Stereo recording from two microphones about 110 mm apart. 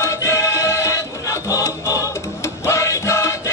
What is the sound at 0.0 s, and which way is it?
Music, 25° left (ahead or behind).